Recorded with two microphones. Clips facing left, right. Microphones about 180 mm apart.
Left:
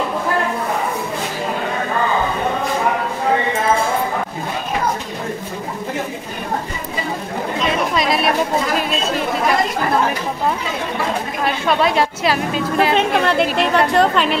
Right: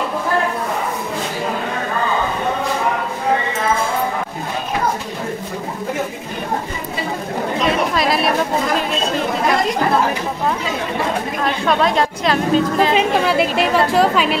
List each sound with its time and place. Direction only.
7.9 s a sound: centre (ahead or behind)
11.4 s a woman's voice: 5° left (ahead or behind)
12.9 s a woman's voice: 5° right (ahead or behind)